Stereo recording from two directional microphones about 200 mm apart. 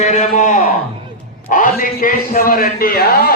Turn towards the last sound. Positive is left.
turn(degrees=50)  # may be behind; listen again after turning